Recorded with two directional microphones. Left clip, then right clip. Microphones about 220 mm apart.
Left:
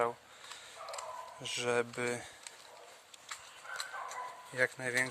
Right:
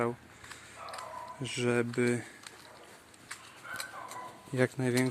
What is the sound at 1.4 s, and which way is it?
Speech, 10° left (ahead or behind).